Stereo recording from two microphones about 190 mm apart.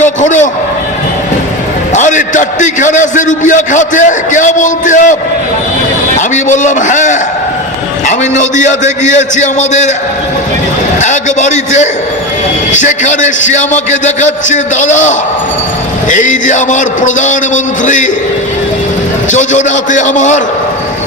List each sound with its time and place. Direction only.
0.0 s a sound: 40° left (ahead or behind)
1.9 s a man's voice: 40° left (ahead or behind)
6.1 s a man's voice: 40° left (ahead or behind)
11.0 s a man's voice: 40° left (ahead or behind)
19.3 s a man's voice: 40° left (ahead or behind)